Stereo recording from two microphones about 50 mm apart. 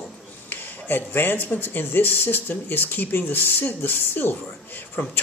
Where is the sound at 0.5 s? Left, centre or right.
Left.